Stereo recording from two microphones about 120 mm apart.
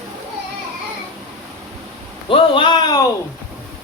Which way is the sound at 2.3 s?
50° left (ahead or behind).